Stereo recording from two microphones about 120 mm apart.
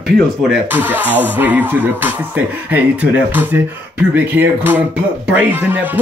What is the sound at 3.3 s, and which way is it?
Speech, 15° right (ahead or behind).